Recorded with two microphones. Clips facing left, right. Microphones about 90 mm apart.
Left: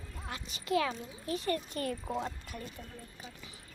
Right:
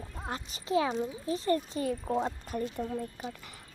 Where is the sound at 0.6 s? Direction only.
20° right (ahead or behind).